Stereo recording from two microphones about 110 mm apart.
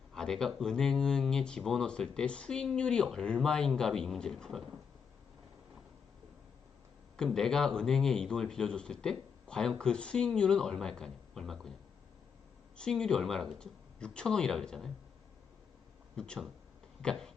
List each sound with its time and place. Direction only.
0.1 s speech: 5° left (ahead or behind)
7.2 s a man's voice: 5° left (ahead or behind)
12.7 s speech: 5° left (ahead or behind)
16.1 s a man's voice: 5° left (ahead or behind)
17.0 s a sound: 5° left (ahead or behind)